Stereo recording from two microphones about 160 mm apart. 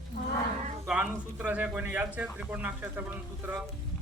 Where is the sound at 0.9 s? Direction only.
10° right (ahead or behind).